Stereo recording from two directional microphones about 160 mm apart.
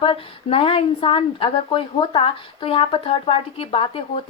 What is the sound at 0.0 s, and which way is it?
Speech, 35° left (ahead or behind).